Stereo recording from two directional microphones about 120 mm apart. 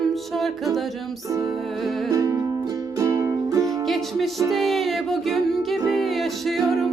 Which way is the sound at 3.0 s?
25° right (ahead or behind).